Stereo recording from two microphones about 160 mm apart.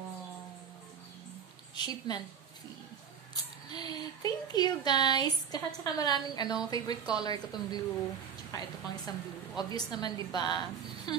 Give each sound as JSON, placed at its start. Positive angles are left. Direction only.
{"t": 1.8, "sound": "speech", "side_deg": 25}
{"t": 3.7, "sound": "speech", "side_deg": 25}